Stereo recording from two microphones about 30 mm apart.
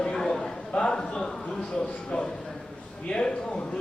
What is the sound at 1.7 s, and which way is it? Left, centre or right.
A man's voice, left.